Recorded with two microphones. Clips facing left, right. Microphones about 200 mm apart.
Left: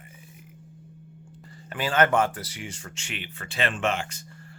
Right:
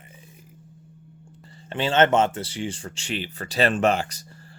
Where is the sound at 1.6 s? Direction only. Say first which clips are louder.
Right 3 dB; 25° right (ahead or behind).